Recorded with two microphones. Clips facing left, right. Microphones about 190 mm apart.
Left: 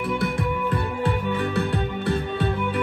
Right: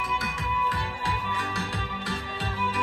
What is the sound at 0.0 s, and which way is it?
Music, 60° left (ahead or behind).